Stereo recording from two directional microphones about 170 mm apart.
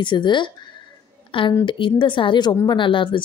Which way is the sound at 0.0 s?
25° left (ahead or behind).